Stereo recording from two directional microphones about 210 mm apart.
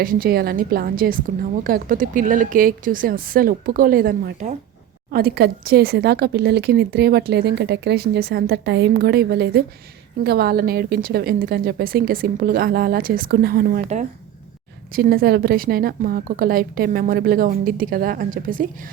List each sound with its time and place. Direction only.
0.0 s speech: 45° right (ahead or behind)